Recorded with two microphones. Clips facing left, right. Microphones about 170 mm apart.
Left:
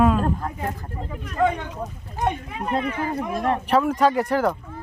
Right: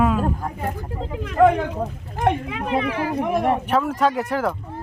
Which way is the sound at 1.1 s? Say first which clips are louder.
Right 6 dB; 80° right.